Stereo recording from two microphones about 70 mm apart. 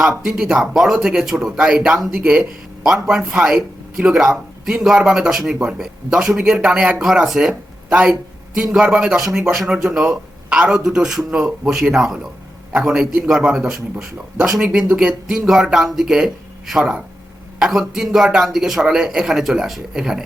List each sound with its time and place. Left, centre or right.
0.0 s speech: centre
5.5 s speech: centre
5.8 s a man's voice: centre